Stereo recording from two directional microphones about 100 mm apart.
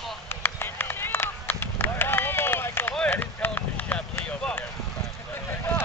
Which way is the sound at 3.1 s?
20° left (ahead or behind).